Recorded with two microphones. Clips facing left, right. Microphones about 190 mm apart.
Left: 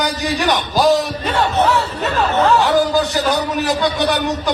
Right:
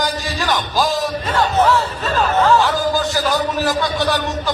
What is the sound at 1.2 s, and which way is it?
Speech, 70° left (ahead or behind).